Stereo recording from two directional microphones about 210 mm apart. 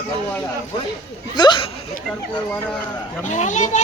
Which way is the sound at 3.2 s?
35° left (ahead or behind).